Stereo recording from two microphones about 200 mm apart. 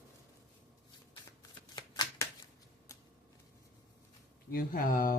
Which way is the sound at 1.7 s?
20° left (ahead or behind).